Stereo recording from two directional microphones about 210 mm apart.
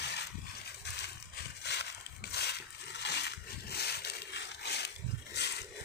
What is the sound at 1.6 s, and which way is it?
Crushing, 55° left (ahead or behind).